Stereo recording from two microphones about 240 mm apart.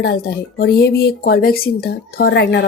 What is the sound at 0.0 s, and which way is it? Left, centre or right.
A woman's voice, left.